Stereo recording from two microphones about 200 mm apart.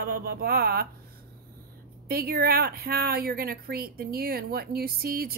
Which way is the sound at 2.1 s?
50° right (ahead or behind).